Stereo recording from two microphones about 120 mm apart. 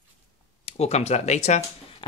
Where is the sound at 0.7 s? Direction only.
60° left (ahead or behind).